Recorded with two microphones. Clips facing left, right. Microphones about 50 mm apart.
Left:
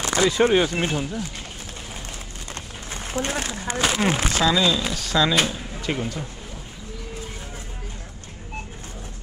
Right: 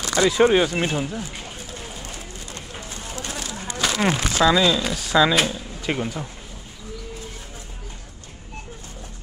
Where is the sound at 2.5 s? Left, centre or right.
Left.